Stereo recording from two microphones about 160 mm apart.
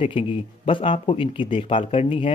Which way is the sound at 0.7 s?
35° left (ahead or behind).